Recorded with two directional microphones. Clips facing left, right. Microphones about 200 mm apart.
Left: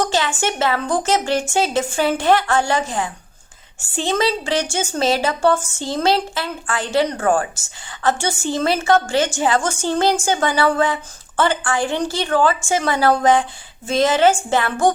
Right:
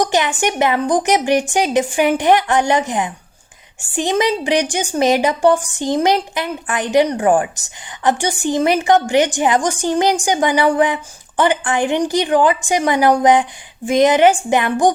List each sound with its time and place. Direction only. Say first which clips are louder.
0.0 s a woman's voice: right 3 dB; 15° right (ahead or behind)